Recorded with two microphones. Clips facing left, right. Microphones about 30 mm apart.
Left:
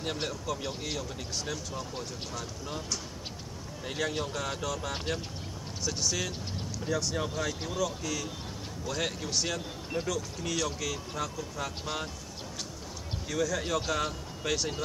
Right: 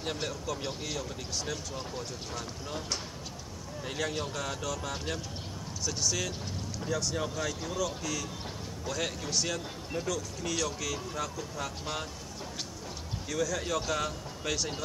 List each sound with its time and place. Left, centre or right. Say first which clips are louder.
0.2 s a man's voice: left 1 dB; left
0.8 s a man's voice: left 1 dB; centre
3.8 s a man's voice: left 1 dB; centre
13.3 s a man's voice: left 1 dB; centre